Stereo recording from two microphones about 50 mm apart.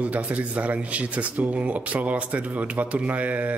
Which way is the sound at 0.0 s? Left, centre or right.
Right.